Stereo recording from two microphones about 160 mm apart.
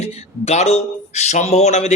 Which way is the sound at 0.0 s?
40° left (ahead or behind).